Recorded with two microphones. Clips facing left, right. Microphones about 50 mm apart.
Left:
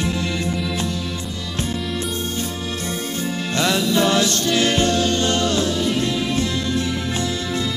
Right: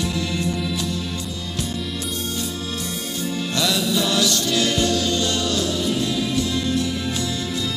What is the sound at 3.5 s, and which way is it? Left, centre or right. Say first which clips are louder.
Music: left 3 dB; left.